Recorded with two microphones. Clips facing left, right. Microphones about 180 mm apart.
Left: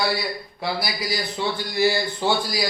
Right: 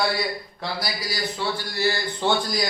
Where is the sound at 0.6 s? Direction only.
10° left (ahead or behind).